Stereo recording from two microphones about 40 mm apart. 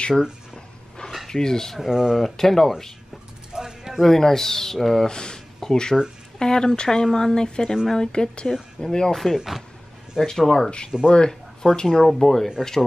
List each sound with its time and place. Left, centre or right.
1.3 s speech: centre
1.8 s speech: centre
2.2 s speech: centre
3.5 s mechanisms: centre
4.0 s speech: centre
5.0 s speech: centre
9.1 s speech: centre
10.9 s speech: centre
11.2 s speech: centre